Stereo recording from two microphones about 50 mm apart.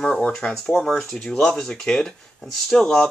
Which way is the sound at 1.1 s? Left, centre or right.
Centre.